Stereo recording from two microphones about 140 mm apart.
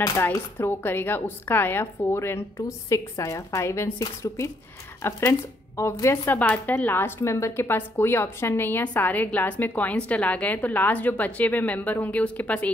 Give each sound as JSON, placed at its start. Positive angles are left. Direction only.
{"t": 0.0, "sound": "a woman's voice", "side_deg": 25}